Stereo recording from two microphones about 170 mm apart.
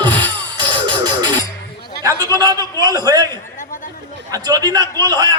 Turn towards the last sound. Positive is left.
turn(degrees=-25)  # may be behind; listen again after turning